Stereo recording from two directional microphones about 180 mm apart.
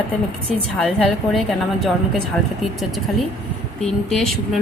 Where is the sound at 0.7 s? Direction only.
Centre (ahead or behind).